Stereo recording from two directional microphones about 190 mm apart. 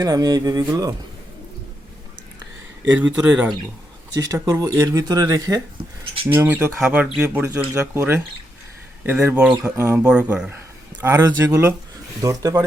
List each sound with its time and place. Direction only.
0.0 s speech: 20° right (ahead or behind)
2.8 s speech: 10° right (ahead or behind)
4.1 s speech: 20° right (ahead or behind)